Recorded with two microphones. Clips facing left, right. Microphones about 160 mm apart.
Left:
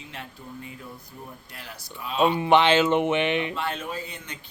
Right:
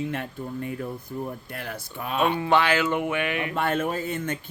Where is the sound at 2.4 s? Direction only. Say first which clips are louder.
Left 5 dB; 20° left (ahead or behind).